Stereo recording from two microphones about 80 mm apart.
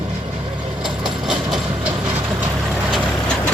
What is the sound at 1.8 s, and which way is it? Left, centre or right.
Vehicle, right.